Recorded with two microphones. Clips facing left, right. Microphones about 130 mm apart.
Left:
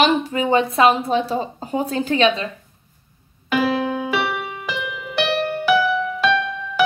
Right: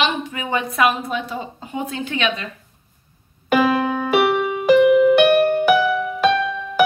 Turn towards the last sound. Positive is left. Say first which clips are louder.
# right 1 dB
turn(degrees=-50)  # may be behind; listen again after turning